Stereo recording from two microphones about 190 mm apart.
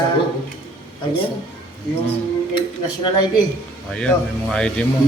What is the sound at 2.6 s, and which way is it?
Speech, 25° left (ahead or behind).